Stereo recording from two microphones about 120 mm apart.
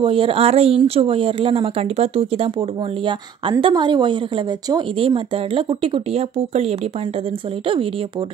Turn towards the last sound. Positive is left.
turn(degrees=-60)  # may be behind; listen again after turning